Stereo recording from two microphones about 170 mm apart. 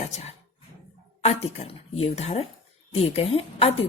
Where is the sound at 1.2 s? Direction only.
40° left (ahead or behind).